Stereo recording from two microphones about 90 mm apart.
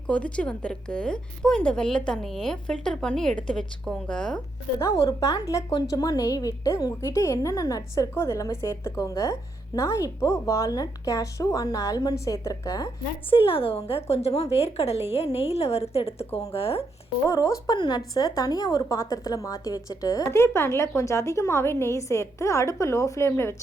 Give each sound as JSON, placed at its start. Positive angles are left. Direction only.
{"t": 0.1, "sound": "a woman's voice", "side_deg": 15}
{"t": 4.8, "sound": "a woman's voice", "side_deg": 35}
{"t": 13.3, "sound": "speech", "side_deg": 90}
{"t": 17.2, "sound": "a woman's voice", "side_deg": 35}
{"t": 17.7, "sound": "a woman's voice", "side_deg": 50}